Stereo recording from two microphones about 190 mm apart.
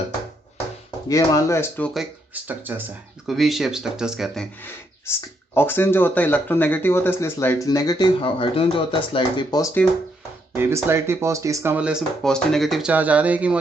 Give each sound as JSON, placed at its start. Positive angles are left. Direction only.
{"t": 0.9, "sound": "speech", "side_deg": 20}
{"t": 1.9, "sound": "speech", "side_deg": -5}
{"t": 5.5, "sound": "speech", "side_deg": 10}
{"t": 10.5, "sound": "speech", "side_deg": -10}